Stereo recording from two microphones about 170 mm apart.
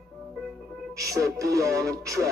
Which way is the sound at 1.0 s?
20° right (ahead or behind).